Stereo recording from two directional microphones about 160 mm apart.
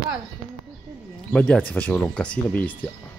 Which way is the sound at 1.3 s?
5° left (ahead or behind).